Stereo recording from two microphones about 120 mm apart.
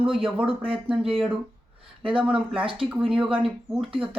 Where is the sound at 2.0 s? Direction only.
45° right (ahead or behind).